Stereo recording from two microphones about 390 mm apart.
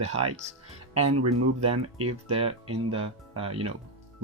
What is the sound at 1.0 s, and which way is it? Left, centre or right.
Speech, right.